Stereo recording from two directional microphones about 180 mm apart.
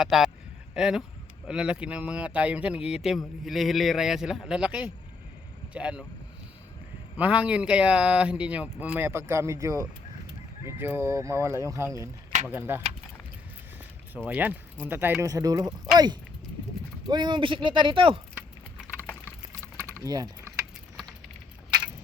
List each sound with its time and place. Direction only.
0.0 s speech: centre (ahead or behind)
7.2 s speech: 5° right (ahead or behind)
14.3 s speech: 10° right (ahead or behind)
17.1 s speech: 25° right (ahead or behind)
18.9 s a sound: 10° left (ahead or behind)
20.0 s speech: 20° right (ahead or behind)
20.9 s keys jangling: centre (ahead or behind)